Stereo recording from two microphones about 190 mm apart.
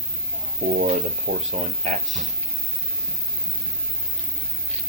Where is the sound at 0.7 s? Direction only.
40° right (ahead or behind).